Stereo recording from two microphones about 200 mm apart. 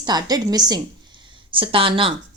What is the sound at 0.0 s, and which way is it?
A woman's voice, 20° right (ahead or behind).